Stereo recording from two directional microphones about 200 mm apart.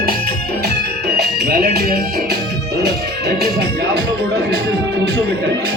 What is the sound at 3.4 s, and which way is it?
Speech, 50° right (ahead or behind).